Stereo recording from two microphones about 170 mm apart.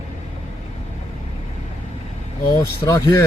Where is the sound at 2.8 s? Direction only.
15° left (ahead or behind).